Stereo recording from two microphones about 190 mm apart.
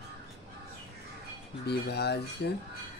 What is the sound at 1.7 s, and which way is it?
Speech, 60° left (ahead or behind).